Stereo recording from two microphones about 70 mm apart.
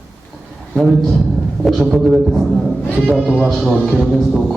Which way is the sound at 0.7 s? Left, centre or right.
Centre.